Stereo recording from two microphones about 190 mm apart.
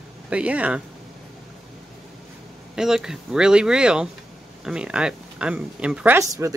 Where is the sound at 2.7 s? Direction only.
5° right (ahead or behind).